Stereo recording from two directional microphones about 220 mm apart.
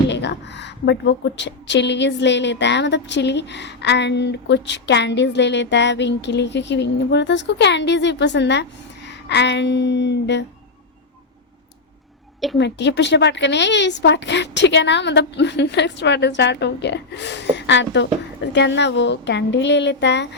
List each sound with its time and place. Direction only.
0.1 s a woman's voice: 50° left (ahead or behind)
12.5 s a woman's voice: 50° left (ahead or behind)